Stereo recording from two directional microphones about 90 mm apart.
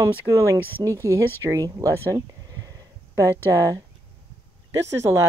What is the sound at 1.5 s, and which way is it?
Speech, 35° right (ahead or behind).